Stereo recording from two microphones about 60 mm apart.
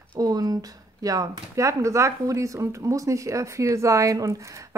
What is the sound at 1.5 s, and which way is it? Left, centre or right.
Speech, right.